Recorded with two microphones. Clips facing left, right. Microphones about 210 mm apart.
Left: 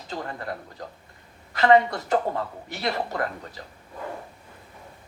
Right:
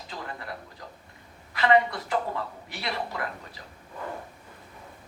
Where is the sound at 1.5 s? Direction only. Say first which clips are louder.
Left 4 dB; 45° left (ahead or behind).